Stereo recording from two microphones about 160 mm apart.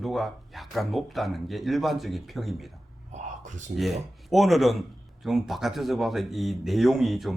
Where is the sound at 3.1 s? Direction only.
50° right (ahead or behind).